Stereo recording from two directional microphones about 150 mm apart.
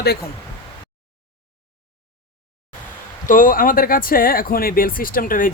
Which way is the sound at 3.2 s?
65° left (ahead or behind).